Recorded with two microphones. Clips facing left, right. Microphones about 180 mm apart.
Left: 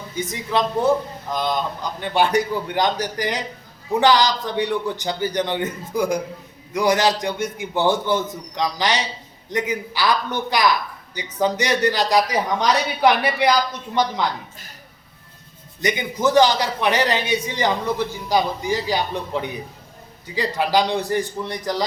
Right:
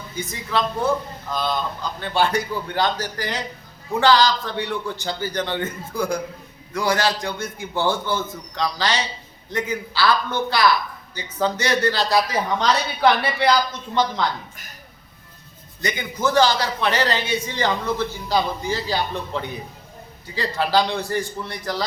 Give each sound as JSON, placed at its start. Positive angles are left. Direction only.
{"t": 0.2, "sound": "a woman's voice", "side_deg": 20}
{"t": 15.8, "sound": "speech", "side_deg": 20}